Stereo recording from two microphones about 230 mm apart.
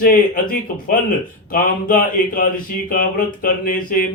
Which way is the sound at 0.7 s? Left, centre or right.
Left.